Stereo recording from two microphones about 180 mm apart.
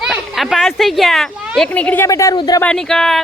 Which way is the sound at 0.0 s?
5° right (ahead or behind).